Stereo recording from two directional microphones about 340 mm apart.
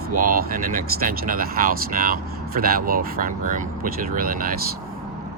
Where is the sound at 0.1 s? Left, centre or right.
Right.